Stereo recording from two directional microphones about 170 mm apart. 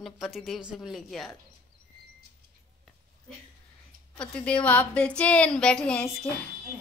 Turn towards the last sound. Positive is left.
turn(degrees=5)  # may be behind; listen again after turning